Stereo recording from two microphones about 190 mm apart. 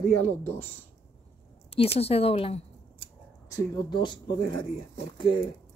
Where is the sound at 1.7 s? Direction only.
30° left (ahead or behind).